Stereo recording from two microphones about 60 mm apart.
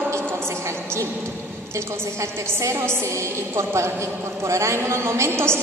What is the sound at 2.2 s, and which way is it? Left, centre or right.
A woman's voice, right.